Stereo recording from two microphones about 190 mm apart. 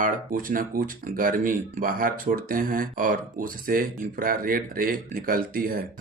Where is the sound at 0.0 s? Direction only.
45° right (ahead or behind).